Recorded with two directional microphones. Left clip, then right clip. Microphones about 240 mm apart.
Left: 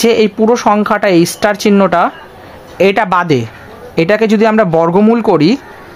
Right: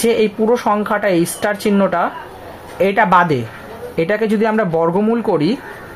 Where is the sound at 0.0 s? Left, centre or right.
Left.